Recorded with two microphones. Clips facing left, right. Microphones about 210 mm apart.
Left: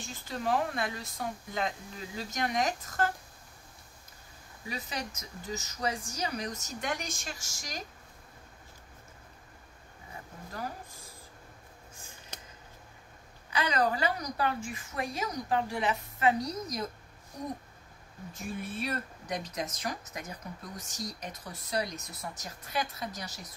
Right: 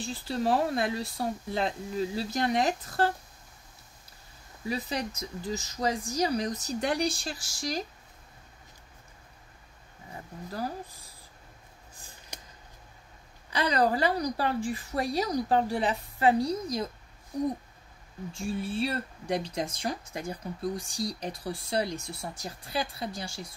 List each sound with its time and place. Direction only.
0.0 s speech: 35° right (ahead or behind)
4.6 s speech: 35° right (ahead or behind)
10.5 s speech: 35° right (ahead or behind)
13.5 s speech: 35° right (ahead or behind)
18.3 s speech: 30° right (ahead or behind)